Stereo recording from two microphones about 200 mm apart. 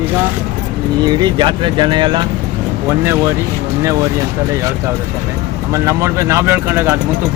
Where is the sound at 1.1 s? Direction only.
20° right (ahead or behind).